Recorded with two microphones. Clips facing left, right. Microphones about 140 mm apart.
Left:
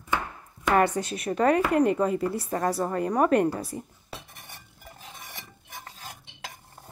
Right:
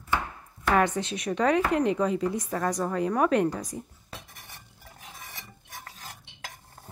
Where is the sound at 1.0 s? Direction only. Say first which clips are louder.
Left 2 dB; 5° left (ahead or behind).